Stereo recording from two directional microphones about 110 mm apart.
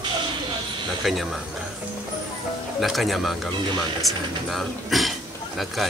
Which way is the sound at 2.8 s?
Centre (ahead or behind).